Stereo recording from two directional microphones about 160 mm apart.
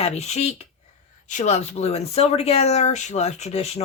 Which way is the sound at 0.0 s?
40° left (ahead or behind).